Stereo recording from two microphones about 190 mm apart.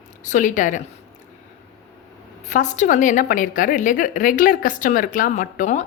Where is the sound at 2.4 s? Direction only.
40° left (ahead or behind).